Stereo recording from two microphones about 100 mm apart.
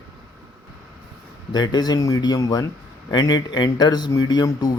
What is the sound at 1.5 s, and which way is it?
Speech, 45° left (ahead or behind).